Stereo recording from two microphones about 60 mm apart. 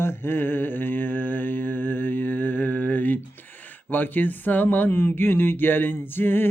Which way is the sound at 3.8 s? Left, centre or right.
Left.